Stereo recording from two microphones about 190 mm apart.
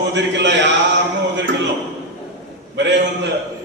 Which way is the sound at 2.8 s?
65° right (ahead or behind).